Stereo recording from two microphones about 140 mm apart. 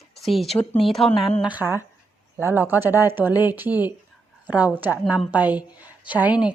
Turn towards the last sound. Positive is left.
turn(degrees=-10)  # may be behind; listen again after turning